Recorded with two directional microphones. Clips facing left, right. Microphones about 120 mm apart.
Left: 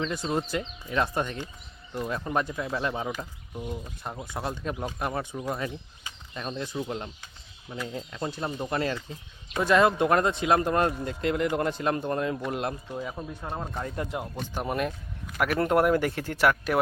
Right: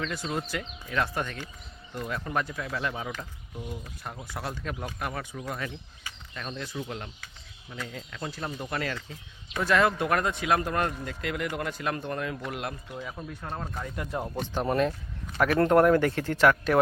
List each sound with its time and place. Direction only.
0.0 s speech: 25° left (ahead or behind)
13.0 s speech: 15° left (ahead or behind)
14.5 s speech: 10° left (ahead or behind)